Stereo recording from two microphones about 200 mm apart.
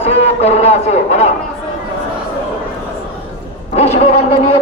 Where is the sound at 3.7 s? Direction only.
35° left (ahead or behind).